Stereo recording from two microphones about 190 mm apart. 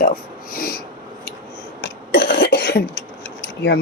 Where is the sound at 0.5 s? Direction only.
50° left (ahead or behind).